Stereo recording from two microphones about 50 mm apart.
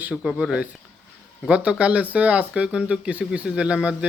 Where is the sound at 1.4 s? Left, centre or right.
Right.